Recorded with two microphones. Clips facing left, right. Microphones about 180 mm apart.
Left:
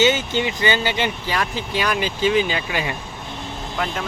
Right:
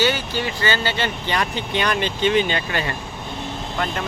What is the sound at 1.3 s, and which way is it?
Speech, centre (ahead or behind).